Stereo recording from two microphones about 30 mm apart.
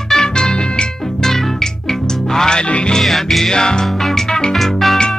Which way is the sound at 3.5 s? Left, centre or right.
Left.